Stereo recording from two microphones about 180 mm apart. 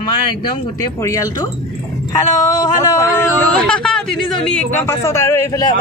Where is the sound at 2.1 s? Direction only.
20° left (ahead or behind).